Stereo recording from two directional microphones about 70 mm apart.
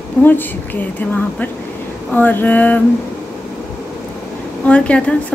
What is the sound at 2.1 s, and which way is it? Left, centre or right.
Speech, left.